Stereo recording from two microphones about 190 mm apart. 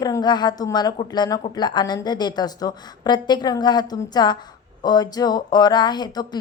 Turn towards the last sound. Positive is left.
turn(degrees=20)  # may be behind; listen again after turning